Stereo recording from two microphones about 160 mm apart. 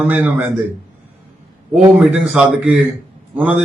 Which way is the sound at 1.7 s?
5° right (ahead or behind).